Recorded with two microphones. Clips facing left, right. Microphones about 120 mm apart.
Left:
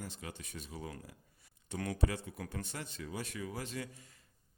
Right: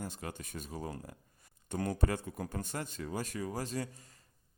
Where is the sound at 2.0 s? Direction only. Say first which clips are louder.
Right 2 dB; 45° right (ahead or behind).